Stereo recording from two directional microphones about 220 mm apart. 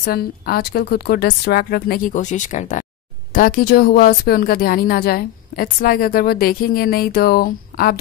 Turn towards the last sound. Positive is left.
turn(degrees=45)  # may be behind; listen again after turning